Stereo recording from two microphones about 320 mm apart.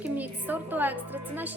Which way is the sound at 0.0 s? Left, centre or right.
Centre.